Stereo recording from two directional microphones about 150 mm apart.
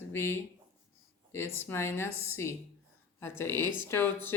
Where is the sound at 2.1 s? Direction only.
15° right (ahead or behind).